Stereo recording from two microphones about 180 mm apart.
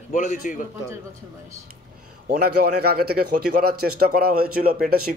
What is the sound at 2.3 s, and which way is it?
A man's voice, 60° right (ahead or behind).